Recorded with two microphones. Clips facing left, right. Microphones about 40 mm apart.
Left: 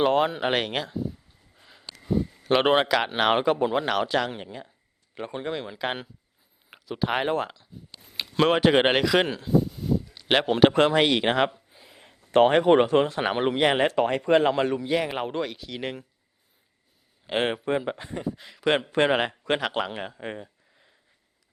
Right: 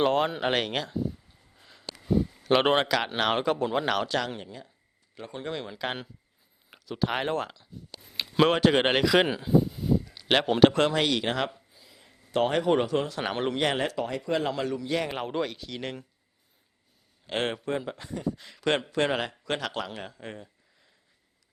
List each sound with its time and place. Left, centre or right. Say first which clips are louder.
0.0 s speech: left 2 dB; centre; by 5.4 s left
5.4 s speech: left 2 dB; centre
7.9 s a sound: right 1 dB; centre
8.5 s speech: left 3 dB; centre
10.2 s speech: left 1 dB; centre; by 11.5 s left
11.7 s a sound: left 4 dB; left
13.2 s speech: left 5 dB; centre
13.8 s speech: left 7 dB; left
14.8 s speech: left 3 dB; centre
17.2 s speech: left 4 dB; centre
18.3 s speech: left 3 dB; centre
18.9 s speech: left 5 dB; left